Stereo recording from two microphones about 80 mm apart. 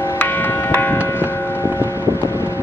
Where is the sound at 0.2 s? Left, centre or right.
Left.